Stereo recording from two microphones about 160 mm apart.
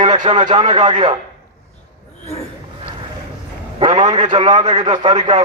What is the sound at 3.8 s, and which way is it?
Speech, 45° right (ahead or behind).